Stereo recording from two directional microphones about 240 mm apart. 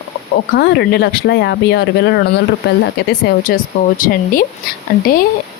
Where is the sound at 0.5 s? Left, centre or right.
Left.